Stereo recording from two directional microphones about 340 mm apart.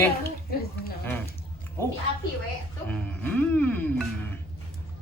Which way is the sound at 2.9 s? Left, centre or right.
Centre.